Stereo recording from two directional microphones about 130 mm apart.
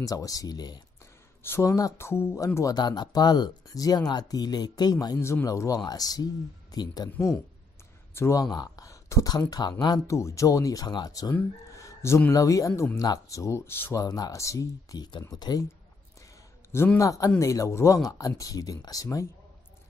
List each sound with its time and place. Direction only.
0.0 s speech: 25° left (ahead or behind)
1.4 s speech: 20° left (ahead or behind)
14.0 s speech: 30° left (ahead or behind)
16.7 s speech: 20° left (ahead or behind)